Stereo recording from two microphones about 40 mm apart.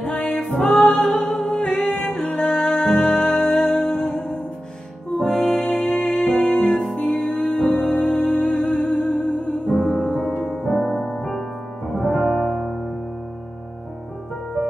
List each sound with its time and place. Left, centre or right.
0.3 s music: centre
1.6 s music: left
5.2 s music: centre
5.9 s music: left
6.4 s music: centre
9.7 s music: left
11.9 s music: centre